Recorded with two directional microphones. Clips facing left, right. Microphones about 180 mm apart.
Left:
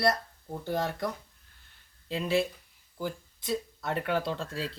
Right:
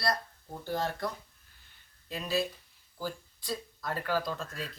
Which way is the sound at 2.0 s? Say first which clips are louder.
Left 4 dB; 25° left (ahead or behind).